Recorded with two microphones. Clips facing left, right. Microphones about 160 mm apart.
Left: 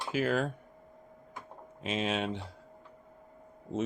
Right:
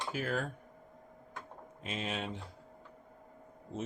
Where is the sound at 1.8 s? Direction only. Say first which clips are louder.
Left 6 dB; 90° left.